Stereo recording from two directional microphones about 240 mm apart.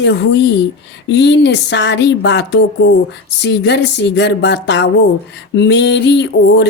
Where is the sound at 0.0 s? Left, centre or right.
Left.